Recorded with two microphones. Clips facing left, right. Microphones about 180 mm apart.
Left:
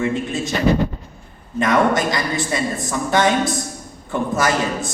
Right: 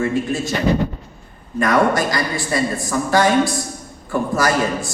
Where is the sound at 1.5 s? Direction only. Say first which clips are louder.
Right 1 dB; 20° left (ahead or behind).